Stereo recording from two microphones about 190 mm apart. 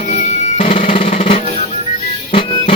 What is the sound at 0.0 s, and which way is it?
Drum, 40° left (ahead or behind).